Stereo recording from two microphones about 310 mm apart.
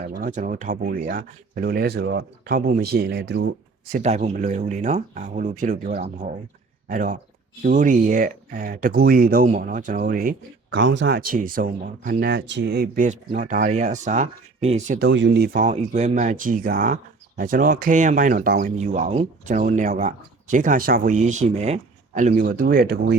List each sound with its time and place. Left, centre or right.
0.0 s speech: right